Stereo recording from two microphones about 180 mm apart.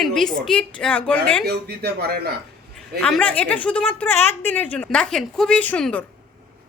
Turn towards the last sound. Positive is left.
turn(degrees=5)  # may be behind; listen again after turning